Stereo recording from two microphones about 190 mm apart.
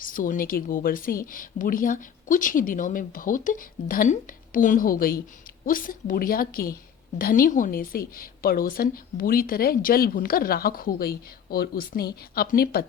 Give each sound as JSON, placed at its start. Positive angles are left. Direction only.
{"t": 0.0, "sound": "a woman's voice", "side_deg": 45}